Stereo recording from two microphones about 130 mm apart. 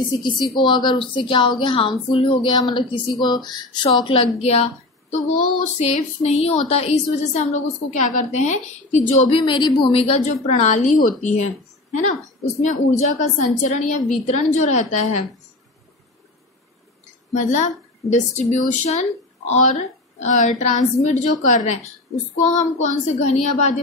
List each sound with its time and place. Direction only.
0.2 s a woman's voice: 35° left (ahead or behind); by 9.3 s 70° left (ahead or behind)
9.3 s speech: 40° left (ahead or behind); by 13.1 s 55° left (ahead or behind)
13.6 s a woman's voice: 75° left (ahead or behind)
14.2 s speech: 70° left (ahead or behind)
17.3 s speech: 65° left (ahead or behind)